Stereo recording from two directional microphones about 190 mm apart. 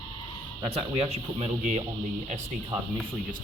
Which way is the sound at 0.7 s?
30° right (ahead or behind).